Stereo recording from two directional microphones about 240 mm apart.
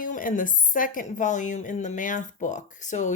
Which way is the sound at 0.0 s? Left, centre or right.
Left.